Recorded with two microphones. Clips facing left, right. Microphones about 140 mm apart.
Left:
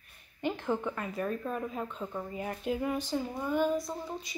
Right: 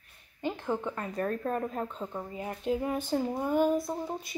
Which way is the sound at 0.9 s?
40° right (ahead or behind).